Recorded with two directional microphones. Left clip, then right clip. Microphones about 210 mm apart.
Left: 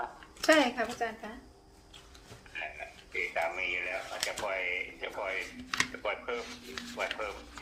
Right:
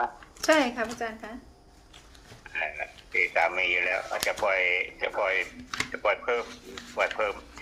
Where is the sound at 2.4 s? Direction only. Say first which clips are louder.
Right 8 dB; 50° right (ahead or behind).